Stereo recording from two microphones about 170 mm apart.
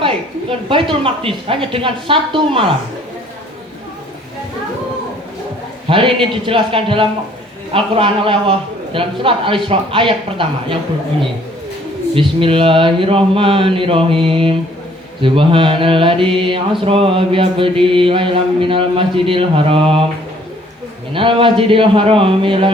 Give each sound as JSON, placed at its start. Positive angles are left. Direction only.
{"t": 0.7, "sound": "mantra", "side_deg": -30}
{"t": 5.9, "sound": "mantra", "side_deg": -30}
{"t": 12.1, "sound": "mantra", "side_deg": -30}
{"t": 21.1, "sound": "mantra", "side_deg": -30}